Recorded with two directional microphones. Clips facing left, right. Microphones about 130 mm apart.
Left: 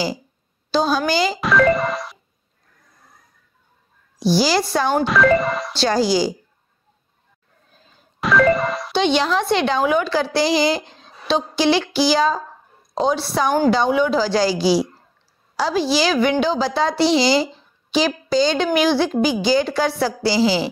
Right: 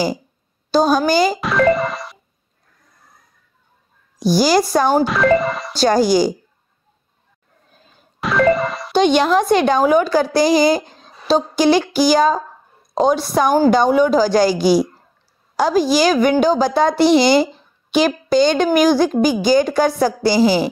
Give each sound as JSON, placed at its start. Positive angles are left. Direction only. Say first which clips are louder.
{"t": 0.7, "sound": "a woman's voice", "louder": "right 4 dB", "side_deg": -45}
{"t": 1.4, "sound": "speech", "louder": "right 1 dB", "side_deg": 0}
{"t": 4.2, "sound": "a woman's voice", "louder": "right 3 dB", "side_deg": -45}
{"t": 5.0, "sound": "speech", "louder": "right 1 dB", "side_deg": 0}
{"t": 5.8, "sound": "a woman's voice", "louder": "right 5 dB", "side_deg": -50}
{"t": 8.2, "sound": "music", "louder": "right 1 dB", "side_deg": 0}
{"t": 8.9, "sound": "a woman's voice", "louder": "right 5 dB", "side_deg": -45}